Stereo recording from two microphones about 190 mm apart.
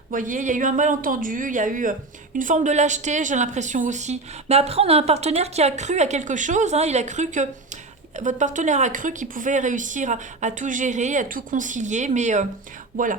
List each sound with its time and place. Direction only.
0.1 s a woman's voice: 45° right (ahead or behind)